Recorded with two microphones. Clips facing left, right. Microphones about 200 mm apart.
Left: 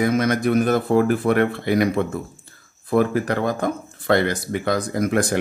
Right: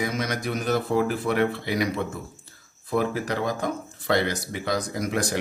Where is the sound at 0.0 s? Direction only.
55° left (ahead or behind).